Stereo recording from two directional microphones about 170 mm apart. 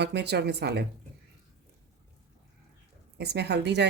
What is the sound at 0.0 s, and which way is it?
Speech, 80° right.